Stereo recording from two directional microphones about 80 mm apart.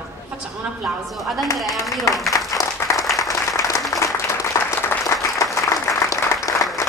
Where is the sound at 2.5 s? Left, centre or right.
Left.